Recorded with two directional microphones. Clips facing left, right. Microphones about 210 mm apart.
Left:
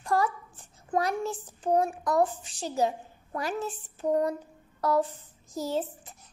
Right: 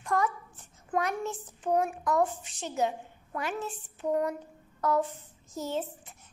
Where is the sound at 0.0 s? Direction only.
35° left (ahead or behind).